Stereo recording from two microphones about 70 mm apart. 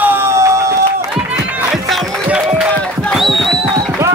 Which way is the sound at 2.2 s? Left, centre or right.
Centre.